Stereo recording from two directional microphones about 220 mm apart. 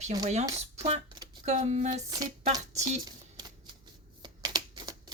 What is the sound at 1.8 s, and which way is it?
Speech, 20° right (ahead or behind).